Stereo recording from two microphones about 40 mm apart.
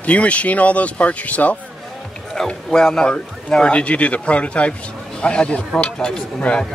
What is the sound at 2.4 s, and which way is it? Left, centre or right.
A man's voice, centre.